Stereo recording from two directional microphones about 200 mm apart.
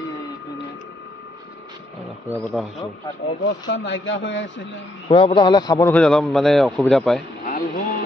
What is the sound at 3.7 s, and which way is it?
Speech, 60° left (ahead or behind).